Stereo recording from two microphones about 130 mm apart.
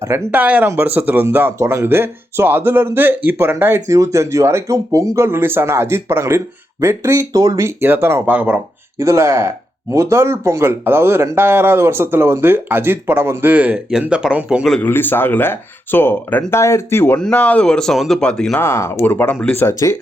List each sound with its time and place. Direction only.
0.3 s speech: 10° right (ahead or behind)
9.0 s speech: 25° right (ahead or behind); by 14.7 s 5° right (ahead or behind)
14.7 s speech: 15° left (ahead or behind)
18.6 s speech: 20° left (ahead or behind)